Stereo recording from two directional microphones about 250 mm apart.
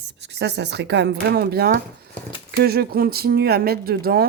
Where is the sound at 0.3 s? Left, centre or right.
Right.